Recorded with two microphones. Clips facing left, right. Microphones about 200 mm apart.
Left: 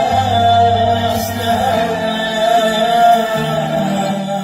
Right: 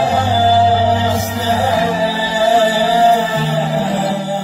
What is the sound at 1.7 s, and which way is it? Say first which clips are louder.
Music: even; 60° left (ahead or behind).